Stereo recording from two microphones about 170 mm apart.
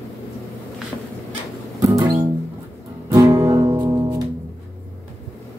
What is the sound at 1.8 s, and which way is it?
Music, 20° right (ahead or behind).